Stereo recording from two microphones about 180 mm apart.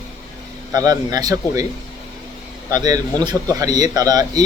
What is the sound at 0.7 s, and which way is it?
Speech, 20° right (ahead or behind).